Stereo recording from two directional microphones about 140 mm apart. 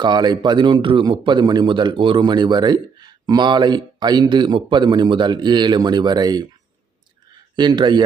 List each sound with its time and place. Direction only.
0.0 s speech: 30° right (ahead or behind)
7.5 s speech: 30° right (ahead or behind)